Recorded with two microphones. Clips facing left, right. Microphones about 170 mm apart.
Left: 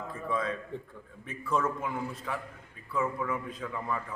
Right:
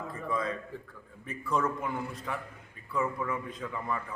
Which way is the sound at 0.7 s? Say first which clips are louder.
Left 3 dB; 20° left (ahead or behind).